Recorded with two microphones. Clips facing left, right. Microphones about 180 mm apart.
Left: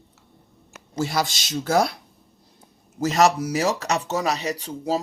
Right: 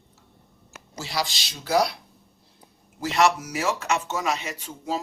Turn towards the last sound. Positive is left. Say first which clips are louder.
# left 5 dB
turn(degrees=35)  # may be behind; listen again after turning